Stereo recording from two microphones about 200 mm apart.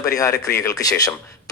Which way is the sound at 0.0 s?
15° left (ahead or behind).